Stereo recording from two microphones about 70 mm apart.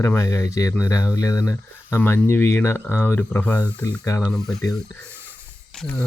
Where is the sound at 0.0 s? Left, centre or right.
Left.